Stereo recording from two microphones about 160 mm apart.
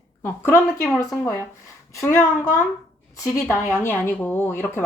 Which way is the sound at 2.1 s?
15° left (ahead or behind).